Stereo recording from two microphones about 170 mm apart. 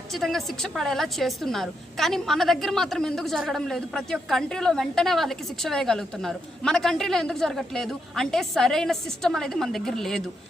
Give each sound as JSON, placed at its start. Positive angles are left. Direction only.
{"t": 0.1, "sound": "a woman's voice", "side_deg": 0}